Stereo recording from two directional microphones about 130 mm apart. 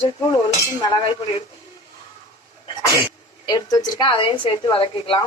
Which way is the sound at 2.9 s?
30° left (ahead or behind).